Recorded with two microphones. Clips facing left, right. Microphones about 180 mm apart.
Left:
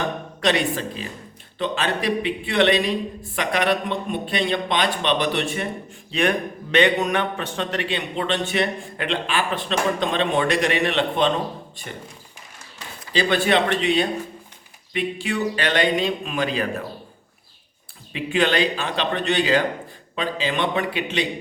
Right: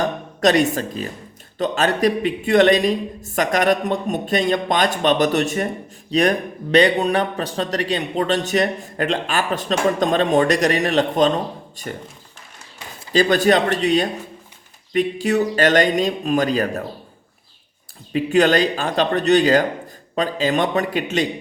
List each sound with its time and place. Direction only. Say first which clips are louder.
0.0 s a man's voice: right 5 dB; 45° right (ahead or behind)
13.1 s a man's voice: right 4 dB; 40° right (ahead or behind)
18.1 s a man's voice: right 6 dB; 40° right (ahead or behind)